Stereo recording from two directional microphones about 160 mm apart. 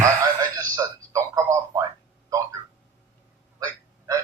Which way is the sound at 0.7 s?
20° right (ahead or behind).